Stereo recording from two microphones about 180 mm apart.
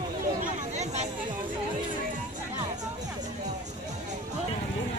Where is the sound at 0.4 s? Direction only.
40° right (ahead or behind).